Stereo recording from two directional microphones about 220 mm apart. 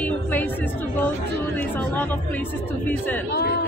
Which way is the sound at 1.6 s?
5° left (ahead or behind).